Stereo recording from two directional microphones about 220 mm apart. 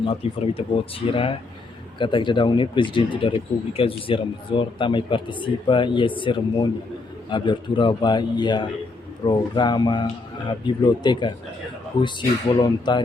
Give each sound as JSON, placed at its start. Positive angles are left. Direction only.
{"t": 0.2, "sound": "speech", "side_deg": 25}
{"t": 12.5, "sound": "speech", "side_deg": 20}